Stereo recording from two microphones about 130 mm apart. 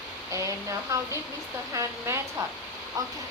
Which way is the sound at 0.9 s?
25° right (ahead or behind).